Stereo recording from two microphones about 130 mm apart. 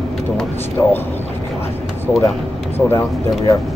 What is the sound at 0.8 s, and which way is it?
Speech, 15° left (ahead or behind).